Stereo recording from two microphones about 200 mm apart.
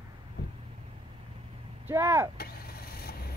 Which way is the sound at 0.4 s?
60° left (ahead or behind).